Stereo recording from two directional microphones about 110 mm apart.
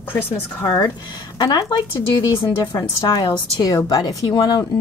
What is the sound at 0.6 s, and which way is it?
Speech, 35° left (ahead or behind).